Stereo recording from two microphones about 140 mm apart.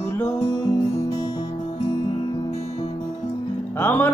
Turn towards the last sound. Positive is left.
turn(degrees=15)  # may be behind; listen again after turning